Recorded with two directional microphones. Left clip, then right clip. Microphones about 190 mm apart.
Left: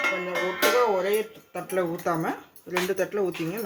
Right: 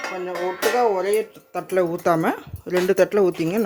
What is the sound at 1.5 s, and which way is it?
Speech, 65° right (ahead or behind).